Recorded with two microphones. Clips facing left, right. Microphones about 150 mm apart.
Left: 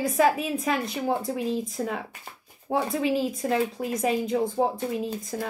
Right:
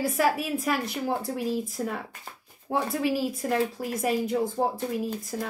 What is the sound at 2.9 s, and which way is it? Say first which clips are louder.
Speech: left 1 dB; 5° right (ahead or behind).